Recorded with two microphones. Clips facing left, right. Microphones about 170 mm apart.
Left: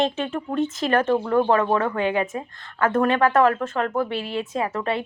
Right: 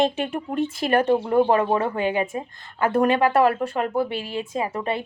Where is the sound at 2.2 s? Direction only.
25° right (ahead or behind).